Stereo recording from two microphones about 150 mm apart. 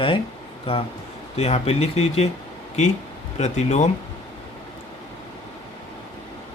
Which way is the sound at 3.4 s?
50° left (ahead or behind).